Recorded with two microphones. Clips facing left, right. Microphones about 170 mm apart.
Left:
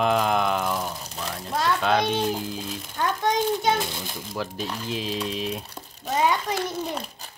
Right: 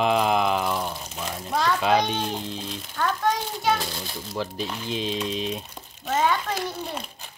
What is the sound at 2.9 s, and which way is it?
Speech, 20° left (ahead or behind).